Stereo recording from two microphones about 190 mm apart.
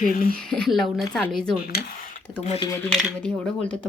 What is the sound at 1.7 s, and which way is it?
Speech, 55° left (ahead or behind).